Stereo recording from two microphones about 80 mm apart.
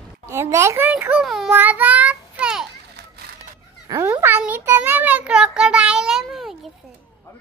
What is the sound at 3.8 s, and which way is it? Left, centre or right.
Cat, right.